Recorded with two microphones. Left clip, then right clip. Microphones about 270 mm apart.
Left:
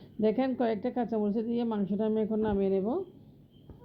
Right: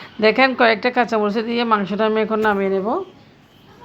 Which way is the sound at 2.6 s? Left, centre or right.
Right.